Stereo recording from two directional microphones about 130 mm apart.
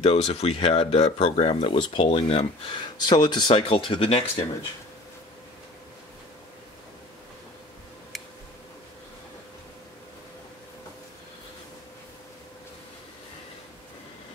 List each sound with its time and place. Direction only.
0.0 s speech: 50° left (ahead or behind)